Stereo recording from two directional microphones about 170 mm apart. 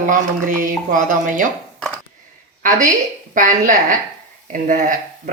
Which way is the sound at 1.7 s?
5° left (ahead or behind).